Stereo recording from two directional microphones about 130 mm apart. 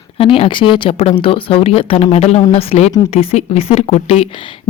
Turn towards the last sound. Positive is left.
turn(degrees=50)  # may be behind; listen again after turning